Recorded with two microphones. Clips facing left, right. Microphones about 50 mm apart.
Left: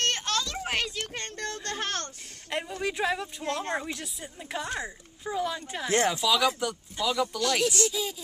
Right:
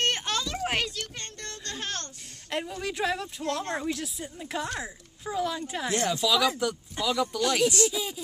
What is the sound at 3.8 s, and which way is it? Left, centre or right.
Speech, centre.